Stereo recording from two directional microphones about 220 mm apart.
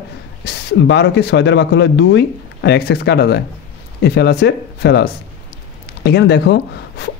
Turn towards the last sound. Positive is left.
turn(degrees=50)  # may be behind; listen again after turning